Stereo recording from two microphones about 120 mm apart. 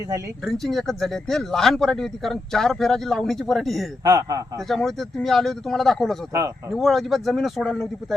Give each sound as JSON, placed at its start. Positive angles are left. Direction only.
{"t": 0.4, "sound": "speech", "side_deg": 5}
{"t": 4.0, "sound": "a man's voice", "side_deg": -30}
{"t": 4.7, "sound": "speech", "side_deg": 0}